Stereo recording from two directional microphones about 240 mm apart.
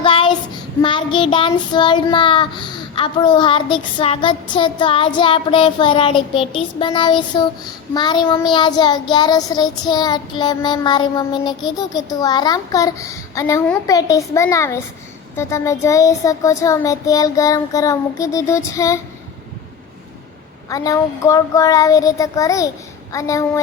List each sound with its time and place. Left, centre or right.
0.0 s child singing: left
20.7 s child singing: centre